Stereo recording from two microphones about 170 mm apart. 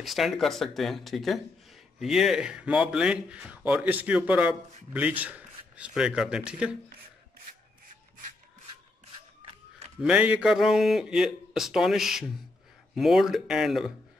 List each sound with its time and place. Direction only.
0.0 s speech: centre (ahead or behind)
10.0 s speech: 10° right (ahead or behind)